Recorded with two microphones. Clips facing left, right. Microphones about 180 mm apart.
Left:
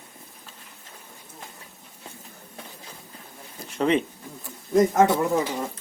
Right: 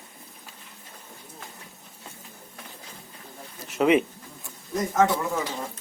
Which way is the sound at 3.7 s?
5° right (ahead or behind).